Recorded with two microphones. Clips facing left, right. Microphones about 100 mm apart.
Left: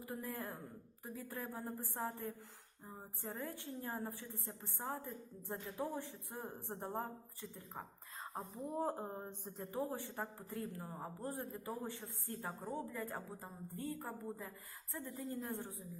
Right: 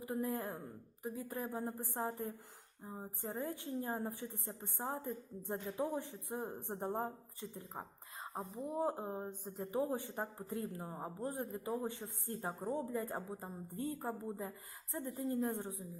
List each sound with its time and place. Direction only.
0.0 s a woman's voice: 20° right (ahead or behind)
8.5 s a woman's voice: 5° right (ahead or behind)
9.7 s a woman's voice: 20° right (ahead or behind)